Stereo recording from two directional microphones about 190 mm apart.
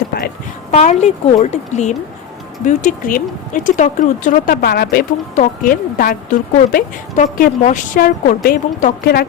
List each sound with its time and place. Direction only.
0.7 s a woman's voice: 35° left (ahead or behind); by 9.2 s 50° left (ahead or behind)